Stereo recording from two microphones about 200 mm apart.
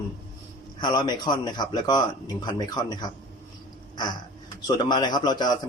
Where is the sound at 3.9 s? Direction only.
20° left (ahead or behind).